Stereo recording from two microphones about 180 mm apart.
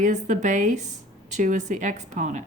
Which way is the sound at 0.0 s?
45° right (ahead or behind).